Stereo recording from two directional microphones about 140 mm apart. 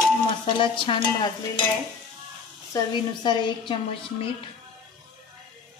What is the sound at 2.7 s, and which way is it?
Stir, 30° left (ahead or behind).